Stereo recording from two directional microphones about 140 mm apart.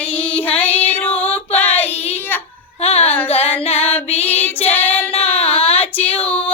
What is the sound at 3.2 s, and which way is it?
Female singing, 45° left (ahead or behind).